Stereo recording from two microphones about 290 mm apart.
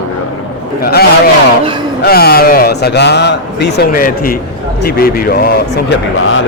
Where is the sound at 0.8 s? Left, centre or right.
Left.